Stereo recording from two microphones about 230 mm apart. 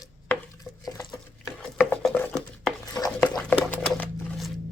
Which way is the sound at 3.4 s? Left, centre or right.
Centre.